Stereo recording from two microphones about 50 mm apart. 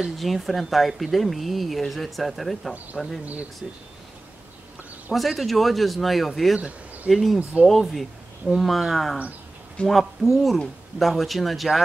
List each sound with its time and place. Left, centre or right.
0.2 s speech: centre
2.9 s speech: centre
5.1 s speech: centre
7.5 s speech: centre
7.9 s speech: centre